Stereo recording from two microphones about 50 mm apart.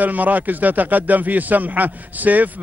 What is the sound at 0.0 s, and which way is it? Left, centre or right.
A man's voice, right.